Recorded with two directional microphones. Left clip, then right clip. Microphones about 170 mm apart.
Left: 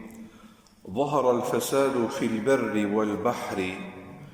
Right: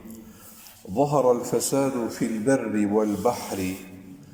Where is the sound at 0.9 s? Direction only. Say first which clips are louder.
Right 3 dB; 30° right (ahead or behind).